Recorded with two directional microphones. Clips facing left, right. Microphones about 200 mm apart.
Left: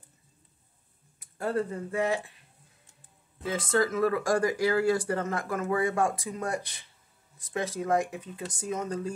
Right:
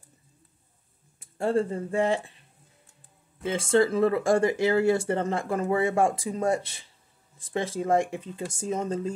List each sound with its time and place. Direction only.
1.2 s speech: 25° right (ahead or behind)
3.4 s speech: 25° right (ahead or behind)